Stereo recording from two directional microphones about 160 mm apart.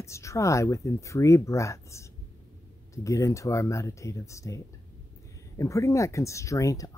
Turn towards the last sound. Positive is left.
turn(degrees=20)  # may be behind; listen again after turning